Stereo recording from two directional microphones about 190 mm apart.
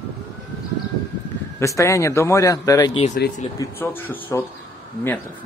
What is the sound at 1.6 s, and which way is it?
Speech, 15° left (ahead or behind).